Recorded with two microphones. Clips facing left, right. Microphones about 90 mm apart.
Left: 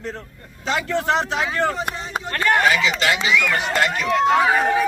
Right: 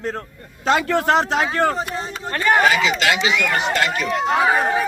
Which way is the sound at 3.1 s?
90° right.